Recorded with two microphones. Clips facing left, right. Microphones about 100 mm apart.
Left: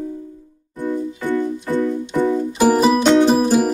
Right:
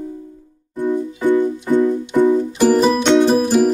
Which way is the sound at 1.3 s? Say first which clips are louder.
Right 6 dB; 20° right (ahead or behind).